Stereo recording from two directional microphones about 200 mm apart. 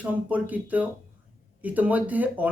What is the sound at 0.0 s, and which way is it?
Speech, 10° right (ahead or behind).